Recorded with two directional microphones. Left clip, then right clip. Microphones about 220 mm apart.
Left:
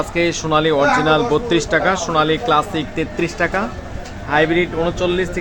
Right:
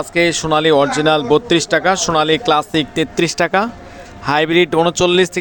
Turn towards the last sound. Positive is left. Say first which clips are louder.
# right 5 dB
turn(degrees=-45)  # may be behind; listen again after turning